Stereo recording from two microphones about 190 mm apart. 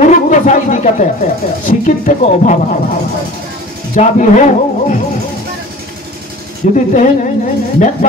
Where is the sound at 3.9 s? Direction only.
40° left (ahead or behind).